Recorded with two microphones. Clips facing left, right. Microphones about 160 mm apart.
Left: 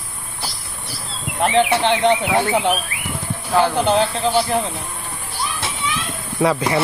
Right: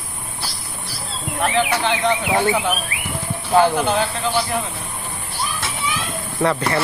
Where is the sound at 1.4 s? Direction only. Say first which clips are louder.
Left 3 dB; 25° left (ahead or behind).